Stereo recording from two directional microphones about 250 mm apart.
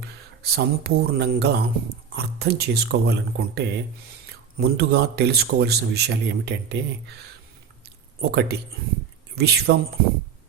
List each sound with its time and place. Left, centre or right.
0.0 s a man's voice: right
8.2 s a man's voice: right